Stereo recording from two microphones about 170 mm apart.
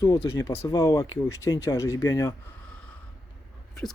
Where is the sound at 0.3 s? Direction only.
15° left (ahead or behind).